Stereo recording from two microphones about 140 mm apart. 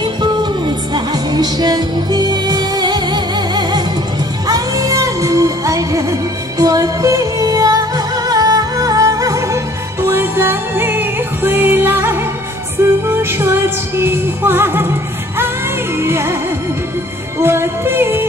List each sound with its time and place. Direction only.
0.0 s music: 30° right (ahead or behind)
17.4 s music: 15° right (ahead or behind)